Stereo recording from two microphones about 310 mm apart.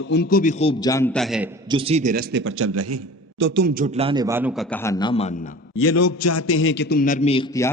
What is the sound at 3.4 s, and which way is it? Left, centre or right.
A man's voice, right.